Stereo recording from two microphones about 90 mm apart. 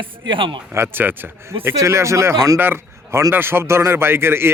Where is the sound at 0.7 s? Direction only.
25° right (ahead or behind).